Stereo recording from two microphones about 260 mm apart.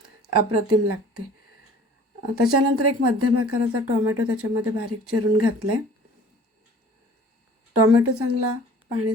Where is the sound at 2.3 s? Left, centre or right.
Right.